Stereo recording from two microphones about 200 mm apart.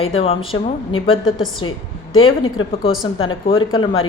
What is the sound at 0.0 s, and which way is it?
A woman's voice, 30° left (ahead or behind).